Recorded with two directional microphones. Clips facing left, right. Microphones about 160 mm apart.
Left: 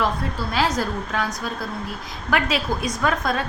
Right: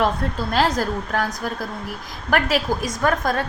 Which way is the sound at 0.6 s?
45° right (ahead or behind).